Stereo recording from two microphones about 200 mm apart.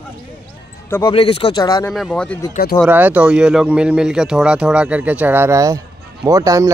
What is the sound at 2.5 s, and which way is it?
Speech, 45° left (ahead or behind).